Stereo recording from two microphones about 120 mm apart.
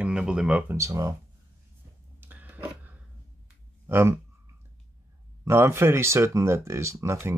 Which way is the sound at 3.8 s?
20° right (ahead or behind).